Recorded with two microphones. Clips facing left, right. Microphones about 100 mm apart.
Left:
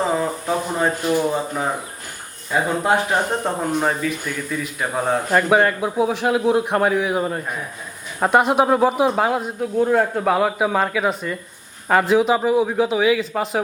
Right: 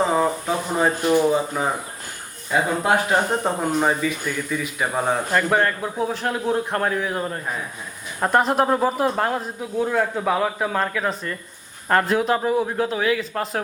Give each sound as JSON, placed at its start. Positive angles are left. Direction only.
{"t": 0.0, "sound": "a man's voice", "side_deg": 0}
{"t": 9.8, "sound": "speech", "side_deg": 20}
{"t": 10.2, "sound": "a man's voice", "side_deg": 5}